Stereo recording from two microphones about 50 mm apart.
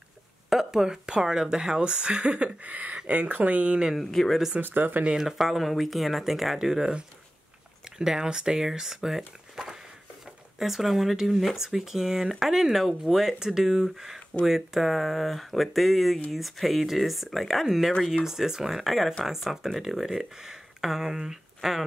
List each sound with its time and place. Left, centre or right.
0.5 s speech: centre; by 3.8 s right
4.0 s speech: centre
4.6 s speech: right
5.1 s speech: centre
8.0 s speech: centre